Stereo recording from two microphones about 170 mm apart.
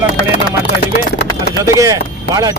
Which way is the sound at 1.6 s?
20° right (ahead or behind).